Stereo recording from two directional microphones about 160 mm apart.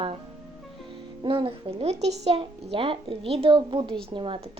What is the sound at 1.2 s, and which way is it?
Speech, 30° right (ahead or behind).